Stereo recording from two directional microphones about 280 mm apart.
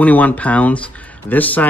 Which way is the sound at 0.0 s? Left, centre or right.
Centre.